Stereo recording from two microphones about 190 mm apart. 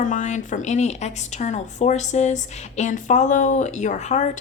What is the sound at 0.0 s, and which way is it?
A woman's voice, 40° left (ahead or behind).